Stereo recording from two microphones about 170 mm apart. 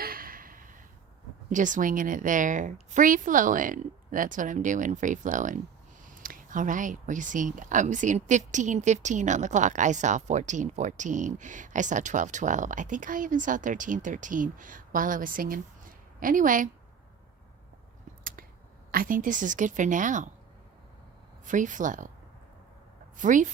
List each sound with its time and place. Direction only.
0.0 s a sound: 60° right (ahead or behind)
1.5 s speech: 50° right (ahead or behind)
18.2 s a sound: 55° right (ahead or behind)
18.9 s speech: 55° right (ahead or behind)
21.4 s speech: 50° right (ahead or behind)
23.1 s speech: 50° right (ahead or behind)